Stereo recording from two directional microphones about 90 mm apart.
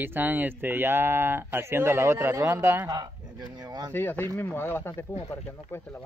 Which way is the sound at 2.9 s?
50° right (ahead or behind).